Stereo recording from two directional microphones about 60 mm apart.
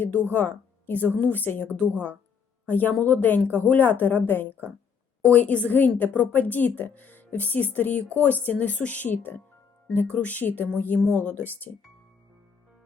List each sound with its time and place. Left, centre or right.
0.0 s speech: left
5.3 s speech: left